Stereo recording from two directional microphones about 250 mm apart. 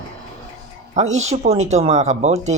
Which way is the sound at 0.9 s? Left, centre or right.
Right.